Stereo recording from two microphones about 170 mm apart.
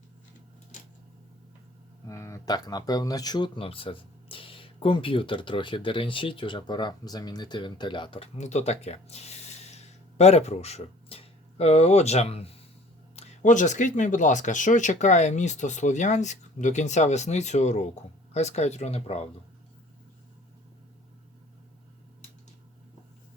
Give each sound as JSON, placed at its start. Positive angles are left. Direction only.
{"t": 2.0, "sound": "speech", "side_deg": 15}
{"t": 8.4, "sound": "speech", "side_deg": 45}
{"t": 13.1, "sound": "speech", "side_deg": 50}